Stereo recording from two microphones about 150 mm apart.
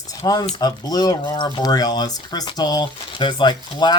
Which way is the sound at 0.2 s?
25° left (ahead or behind).